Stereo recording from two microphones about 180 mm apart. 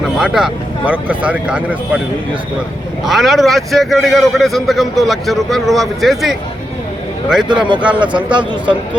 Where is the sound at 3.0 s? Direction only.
Centre (ahead or behind).